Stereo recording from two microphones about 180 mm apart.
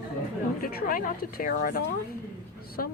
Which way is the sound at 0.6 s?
50° left (ahead or behind).